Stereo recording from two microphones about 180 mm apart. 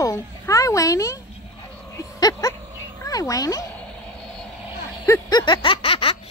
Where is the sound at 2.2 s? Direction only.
20° left (ahead or behind).